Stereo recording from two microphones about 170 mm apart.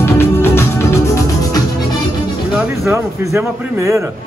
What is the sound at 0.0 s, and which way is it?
Music, 15° left (ahead or behind).